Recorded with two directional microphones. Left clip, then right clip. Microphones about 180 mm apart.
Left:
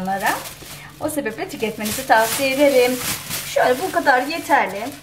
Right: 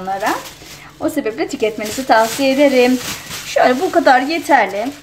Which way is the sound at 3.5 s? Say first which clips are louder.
Right 5 dB; 55° right (ahead or behind).